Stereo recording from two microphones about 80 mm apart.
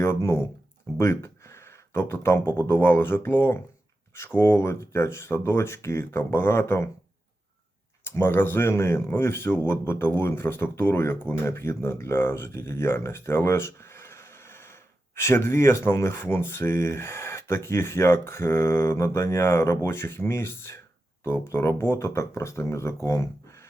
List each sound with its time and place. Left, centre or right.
0.0 s speech: left
0.9 s a sound: left
2.5 s speech: left
8.0 s speech: left